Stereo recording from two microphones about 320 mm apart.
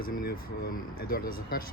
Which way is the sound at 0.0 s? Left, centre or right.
Left.